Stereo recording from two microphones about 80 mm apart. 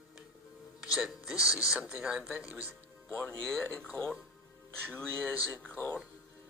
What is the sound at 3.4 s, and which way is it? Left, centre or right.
Speech, centre.